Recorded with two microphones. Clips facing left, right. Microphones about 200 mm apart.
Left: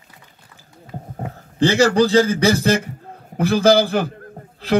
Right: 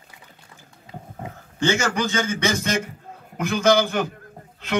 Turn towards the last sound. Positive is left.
turn(degrees=35)  # may be behind; listen again after turning